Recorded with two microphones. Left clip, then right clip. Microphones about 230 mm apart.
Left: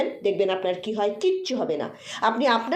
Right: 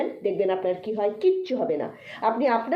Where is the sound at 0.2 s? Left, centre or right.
Left.